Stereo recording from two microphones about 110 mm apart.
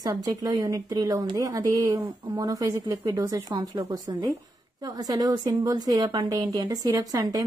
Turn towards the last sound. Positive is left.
turn(degrees=-30)  # may be behind; listen again after turning